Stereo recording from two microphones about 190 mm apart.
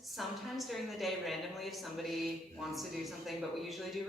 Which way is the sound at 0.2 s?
Centre (ahead or behind).